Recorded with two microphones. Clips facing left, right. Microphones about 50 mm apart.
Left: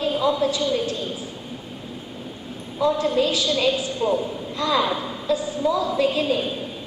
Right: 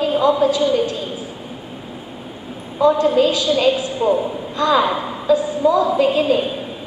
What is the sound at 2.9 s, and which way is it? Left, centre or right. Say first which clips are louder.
A woman's voice: right 6 dB; centre.